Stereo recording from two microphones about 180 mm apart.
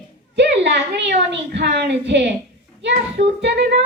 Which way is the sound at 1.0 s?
75° right (ahead or behind).